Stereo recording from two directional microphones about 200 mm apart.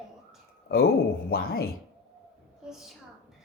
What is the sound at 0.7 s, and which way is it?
Speech, 50° left (ahead or behind).